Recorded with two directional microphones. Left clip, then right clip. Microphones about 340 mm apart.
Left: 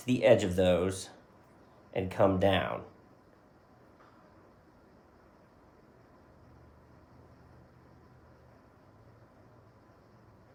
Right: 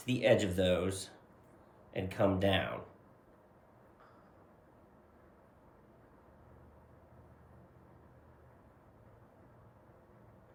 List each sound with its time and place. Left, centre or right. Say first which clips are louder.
0.0 s speech: left 5 dB; centre